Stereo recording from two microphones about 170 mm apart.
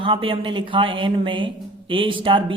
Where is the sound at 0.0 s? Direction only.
30° right (ahead or behind).